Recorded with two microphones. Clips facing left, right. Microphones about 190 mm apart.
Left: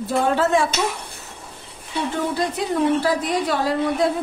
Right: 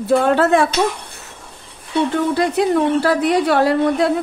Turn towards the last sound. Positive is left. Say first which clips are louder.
# right 5 dB
turn(degrees=-65)  # may be behind; listen again after turning